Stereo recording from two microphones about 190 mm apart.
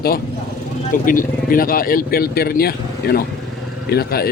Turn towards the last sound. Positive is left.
turn(degrees=55)  # may be behind; listen again after turning